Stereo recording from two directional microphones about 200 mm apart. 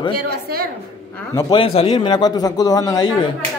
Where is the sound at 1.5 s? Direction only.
30° left (ahead or behind).